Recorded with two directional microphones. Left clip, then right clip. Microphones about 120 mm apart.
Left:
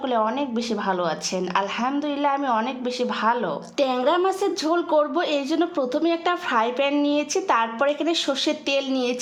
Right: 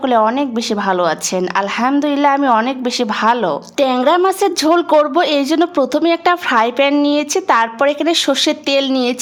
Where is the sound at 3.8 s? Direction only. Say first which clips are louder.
Right 8 dB; 30° right (ahead or behind).